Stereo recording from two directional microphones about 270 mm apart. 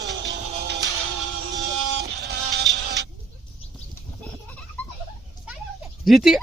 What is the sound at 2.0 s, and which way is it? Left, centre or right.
Music, right.